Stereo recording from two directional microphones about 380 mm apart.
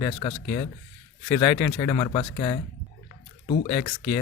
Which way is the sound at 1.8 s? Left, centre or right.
Centre.